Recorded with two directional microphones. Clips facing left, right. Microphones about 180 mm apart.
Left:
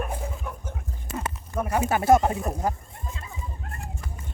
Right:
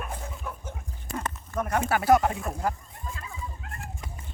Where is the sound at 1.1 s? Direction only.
10° left (ahead or behind).